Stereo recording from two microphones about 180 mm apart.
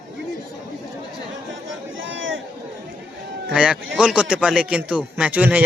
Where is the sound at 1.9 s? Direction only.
90° right.